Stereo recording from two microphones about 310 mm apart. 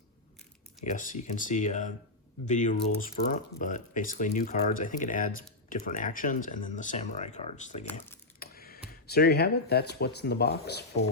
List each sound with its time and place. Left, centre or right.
0.9 s speech: left
8.4 s a sound: left
9.0 s speech: left